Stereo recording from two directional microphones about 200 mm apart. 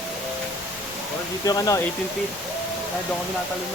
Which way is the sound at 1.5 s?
20° left (ahead or behind).